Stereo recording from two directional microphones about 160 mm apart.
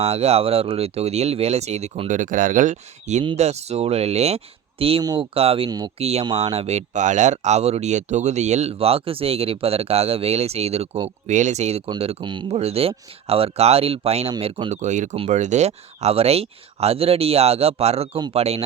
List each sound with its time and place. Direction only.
0.0 s speech: 40° right (ahead or behind); by 5.9 s 25° right (ahead or behind)
6.0 s speech: 40° right (ahead or behind)
14.7 s speech: 50° right (ahead or behind)